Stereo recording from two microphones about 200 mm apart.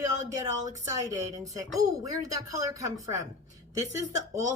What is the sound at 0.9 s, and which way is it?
A woman's voice, 15° right (ahead or behind).